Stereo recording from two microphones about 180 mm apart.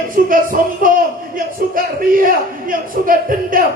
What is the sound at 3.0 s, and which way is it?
Speech, 50° right (ahead or behind).